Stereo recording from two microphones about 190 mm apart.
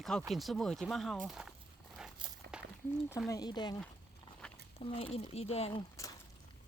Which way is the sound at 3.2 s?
20° left (ahead or behind).